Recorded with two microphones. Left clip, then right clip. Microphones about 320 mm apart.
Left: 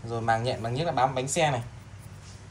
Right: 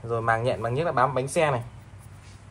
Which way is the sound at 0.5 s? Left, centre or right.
Centre.